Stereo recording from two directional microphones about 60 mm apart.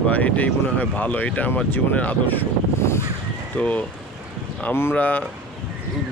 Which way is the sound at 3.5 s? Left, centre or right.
Left.